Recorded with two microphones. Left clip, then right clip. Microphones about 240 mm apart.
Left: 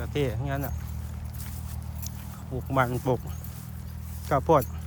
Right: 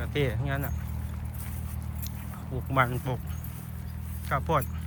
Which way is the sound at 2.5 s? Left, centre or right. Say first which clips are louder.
Even; centre.